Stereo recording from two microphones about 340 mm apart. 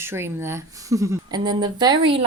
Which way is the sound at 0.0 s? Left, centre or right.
Centre.